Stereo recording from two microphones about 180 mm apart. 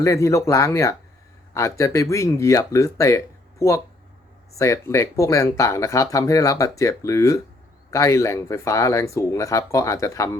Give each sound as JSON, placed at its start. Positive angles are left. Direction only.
{"t": 0.0, "sound": "speech", "side_deg": 15}